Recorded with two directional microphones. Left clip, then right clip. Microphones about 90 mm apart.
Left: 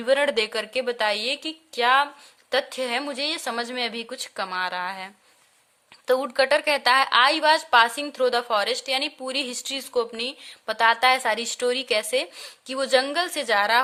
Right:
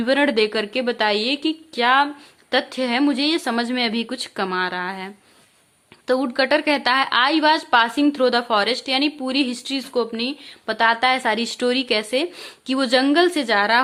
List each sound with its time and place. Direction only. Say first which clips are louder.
0.0 s a woman's voice: right 3 dB; 35° left (ahead or behind)
4.6 s a woman's voice: right 3 dB; 40° left (ahead or behind)
12.6 s speech: right 3 dB; 20° left (ahead or behind)